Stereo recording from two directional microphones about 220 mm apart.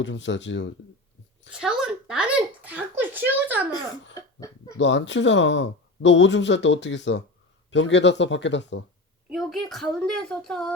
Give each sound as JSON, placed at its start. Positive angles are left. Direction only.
{"t": 0.0, "sound": "speech", "side_deg": 55}
{"t": 1.5, "sound": "a sound", "side_deg": -5}
{"t": 4.1, "sound": "cough", "side_deg": 15}
{"t": 4.8, "sound": "speech", "side_deg": 55}
{"t": 9.3, "sound": "a woman's voice", "side_deg": 0}